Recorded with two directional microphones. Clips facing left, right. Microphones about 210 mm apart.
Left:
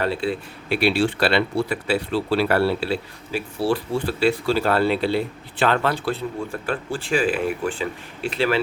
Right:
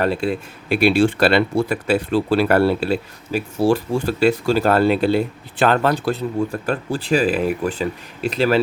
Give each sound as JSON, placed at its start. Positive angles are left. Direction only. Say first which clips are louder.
{"t": 0.7, "sound": "speech", "louder": "right 5 dB", "side_deg": -50}